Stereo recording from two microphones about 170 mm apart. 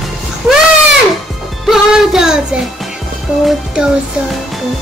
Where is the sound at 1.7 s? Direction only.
5° right (ahead or behind).